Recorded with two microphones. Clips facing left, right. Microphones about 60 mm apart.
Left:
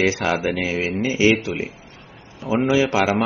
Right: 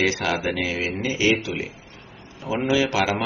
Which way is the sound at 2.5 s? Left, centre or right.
Left.